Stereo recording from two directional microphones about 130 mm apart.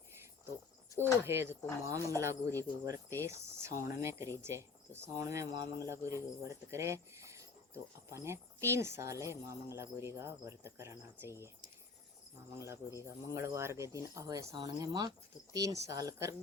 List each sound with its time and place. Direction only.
1.2 s speech: 20° right (ahead or behind)
12.5 s speech: 20° right (ahead or behind)